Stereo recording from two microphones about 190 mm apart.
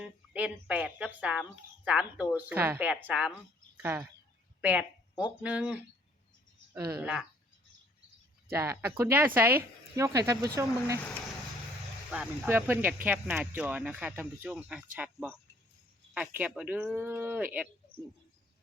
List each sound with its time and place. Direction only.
0.0 s speech: 5° right (ahead or behind)
4.6 s speech: 5° right (ahead or behind)
8.4 s speech: 15° right (ahead or behind)
12.1 s speech: 10° right (ahead or behind)